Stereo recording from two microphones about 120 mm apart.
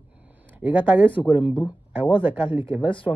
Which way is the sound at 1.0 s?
45° left (ahead or behind).